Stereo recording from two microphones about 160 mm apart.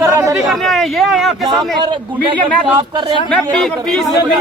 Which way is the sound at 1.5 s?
30° right (ahead or behind).